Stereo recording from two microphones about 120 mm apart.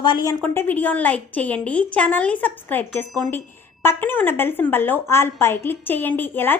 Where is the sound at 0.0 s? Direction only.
35° left (ahead or behind).